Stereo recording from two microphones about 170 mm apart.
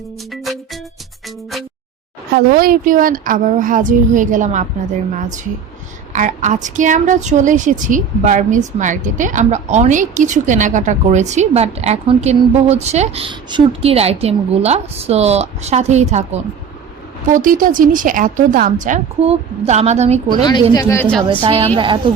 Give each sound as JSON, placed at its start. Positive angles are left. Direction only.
{"t": 0.3, "sound": "music", "side_deg": 0}
{"t": 2.3, "sound": "a woman's voice", "side_deg": -60}
{"t": 6.1, "sound": "a woman's voice", "side_deg": -45}
{"t": 20.4, "sound": "speech", "side_deg": 20}
{"t": 21.4, "sound": "a woman's voice", "side_deg": -30}